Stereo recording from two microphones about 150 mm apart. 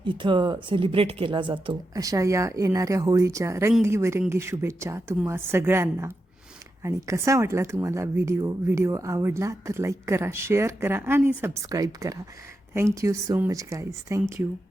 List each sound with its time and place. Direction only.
0.0 s a woman's voice: 35° right (ahead or behind)